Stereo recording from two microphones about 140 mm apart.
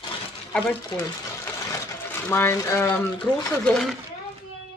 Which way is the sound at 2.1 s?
15° left (ahead or behind).